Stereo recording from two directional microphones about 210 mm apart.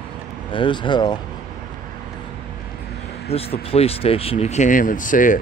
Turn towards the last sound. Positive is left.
turn(degrees=40)  # may be behind; listen again after turning